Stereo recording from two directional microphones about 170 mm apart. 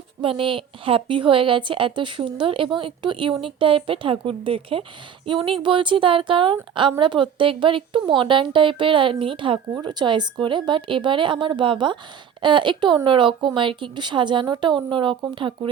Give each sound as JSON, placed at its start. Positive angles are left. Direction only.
{"t": 0.2, "sound": "a woman's voice", "side_deg": -30}